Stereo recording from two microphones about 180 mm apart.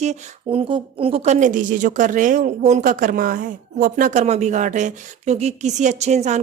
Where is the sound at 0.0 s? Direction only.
40° right (ahead or behind).